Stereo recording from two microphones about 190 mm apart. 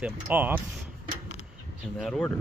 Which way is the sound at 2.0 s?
5° left (ahead or behind).